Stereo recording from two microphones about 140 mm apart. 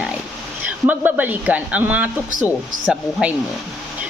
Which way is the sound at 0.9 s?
10° right (ahead or behind).